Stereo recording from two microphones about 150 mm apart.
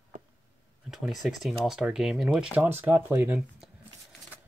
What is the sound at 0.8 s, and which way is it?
Speech, 5° right (ahead or behind).